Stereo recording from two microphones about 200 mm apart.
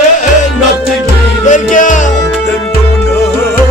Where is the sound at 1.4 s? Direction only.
40° left (ahead or behind).